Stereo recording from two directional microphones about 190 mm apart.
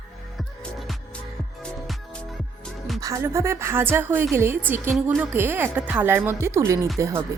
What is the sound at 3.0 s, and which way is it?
A woman's voice, 15° right (ahead or behind).